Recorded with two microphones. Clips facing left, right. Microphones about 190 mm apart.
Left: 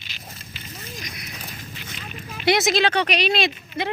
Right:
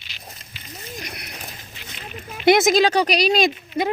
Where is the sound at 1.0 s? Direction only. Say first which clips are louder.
Right 2 dB; 65° right (ahead or behind).